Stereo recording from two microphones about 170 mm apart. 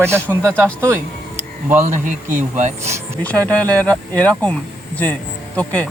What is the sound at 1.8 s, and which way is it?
Speech, 45° right (ahead or behind).